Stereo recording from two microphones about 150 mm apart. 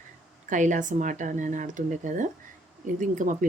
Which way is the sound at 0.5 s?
55° right (ahead or behind).